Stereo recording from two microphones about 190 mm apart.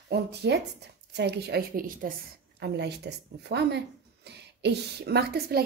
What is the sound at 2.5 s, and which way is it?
Speech, 60° right (ahead or behind).